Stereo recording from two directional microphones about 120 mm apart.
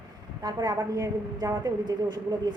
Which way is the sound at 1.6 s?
35° right (ahead or behind).